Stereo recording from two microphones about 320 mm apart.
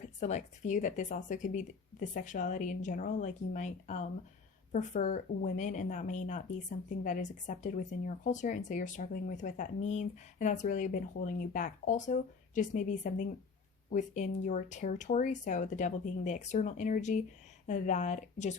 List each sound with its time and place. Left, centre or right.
0.0 s speech: left